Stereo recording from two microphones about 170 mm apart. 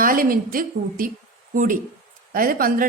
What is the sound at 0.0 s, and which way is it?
A woman's voice, 55° right (ahead or behind).